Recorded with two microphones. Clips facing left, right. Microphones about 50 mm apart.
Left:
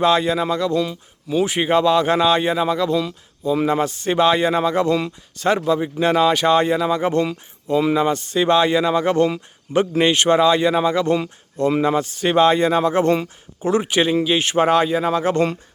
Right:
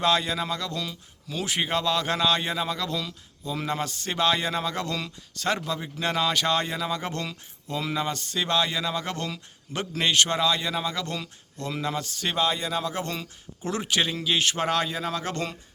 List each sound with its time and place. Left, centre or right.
0.0 s speech: centre
8.4 s speech: left
12.4 s speech: left
13.7 s speech: centre